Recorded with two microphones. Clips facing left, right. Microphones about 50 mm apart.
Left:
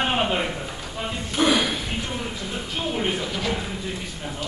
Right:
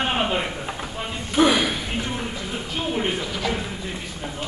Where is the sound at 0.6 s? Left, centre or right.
Right.